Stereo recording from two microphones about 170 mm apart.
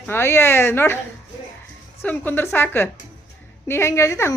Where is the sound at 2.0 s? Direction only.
10° left (ahead or behind).